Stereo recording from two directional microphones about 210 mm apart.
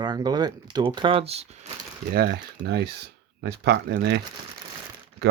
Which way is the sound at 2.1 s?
50° right (ahead or behind).